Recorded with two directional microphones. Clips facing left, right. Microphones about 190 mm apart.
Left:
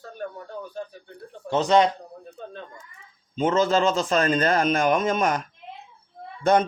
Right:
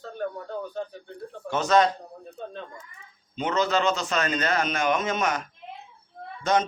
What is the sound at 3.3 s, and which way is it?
Speech, 45° left (ahead or behind).